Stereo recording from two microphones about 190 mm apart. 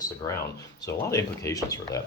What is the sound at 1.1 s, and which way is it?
Speech, 15° left (ahead or behind).